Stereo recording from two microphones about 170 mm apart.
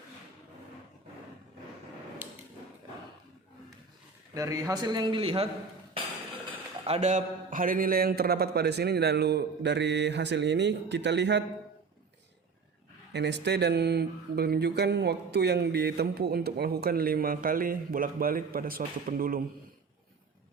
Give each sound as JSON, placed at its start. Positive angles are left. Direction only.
{"t": 2.2, "sound": "a sound", "side_deg": -10}
{"t": 4.4, "sound": "a man's voice", "side_deg": -20}
{"t": 6.8, "sound": "speech", "side_deg": -40}
{"t": 13.1, "sound": "speech", "side_deg": -90}